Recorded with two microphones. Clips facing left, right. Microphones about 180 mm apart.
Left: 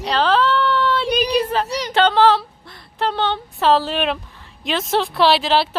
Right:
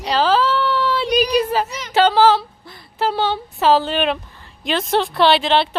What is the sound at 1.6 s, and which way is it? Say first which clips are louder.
Speech: left 7 dB; 35° left (ahead or behind).